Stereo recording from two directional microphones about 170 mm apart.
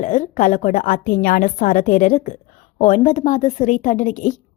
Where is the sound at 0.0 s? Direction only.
50° left (ahead or behind).